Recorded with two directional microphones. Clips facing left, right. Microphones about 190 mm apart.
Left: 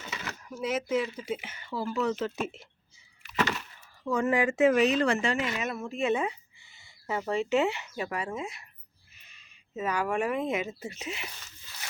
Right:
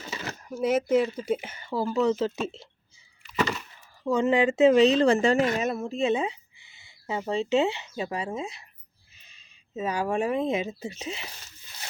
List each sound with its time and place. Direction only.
0.0 s a sound: 35° right (ahead or behind)
0.5 s a woman's voice: 55° right (ahead or behind); by 2.6 s 30° right (ahead or behind)
3.3 s wood: centre (ahead or behind)
4.0 s a woman's voice: 25° right (ahead or behind)